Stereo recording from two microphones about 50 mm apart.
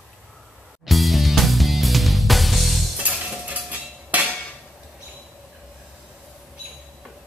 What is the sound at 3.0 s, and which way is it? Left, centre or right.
Cutlery, right.